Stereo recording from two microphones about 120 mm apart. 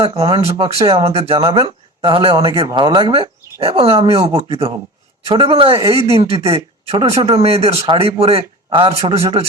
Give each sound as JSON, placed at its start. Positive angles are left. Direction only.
{"t": 0.2, "sound": "speech", "side_deg": -50}